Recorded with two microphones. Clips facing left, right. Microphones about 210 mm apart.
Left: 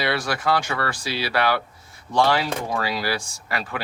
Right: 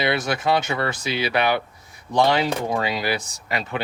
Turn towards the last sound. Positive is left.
turn(degrees=-20)  # may be behind; listen again after turning